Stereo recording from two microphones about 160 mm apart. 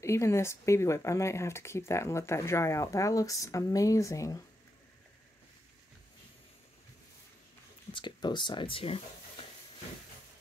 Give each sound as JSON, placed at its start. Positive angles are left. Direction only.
{"t": 0.0, "sound": "speech", "side_deg": 15}
{"t": 7.9, "sound": "speech", "side_deg": 30}